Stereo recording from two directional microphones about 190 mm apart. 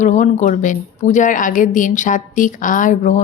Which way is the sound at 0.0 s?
40° left (ahead or behind).